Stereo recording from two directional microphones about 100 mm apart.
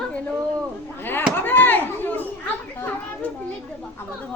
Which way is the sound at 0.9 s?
20° left (ahead or behind).